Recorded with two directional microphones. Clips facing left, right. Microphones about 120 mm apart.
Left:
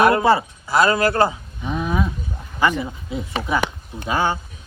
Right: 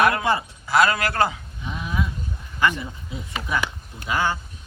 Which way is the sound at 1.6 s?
40° left (ahead or behind).